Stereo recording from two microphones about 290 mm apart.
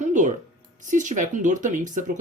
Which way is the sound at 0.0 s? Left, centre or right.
Right.